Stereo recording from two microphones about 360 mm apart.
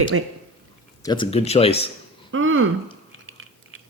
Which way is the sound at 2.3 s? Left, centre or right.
Right.